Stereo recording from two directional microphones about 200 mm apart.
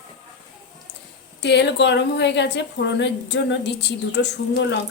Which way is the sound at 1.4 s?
60° left (ahead or behind).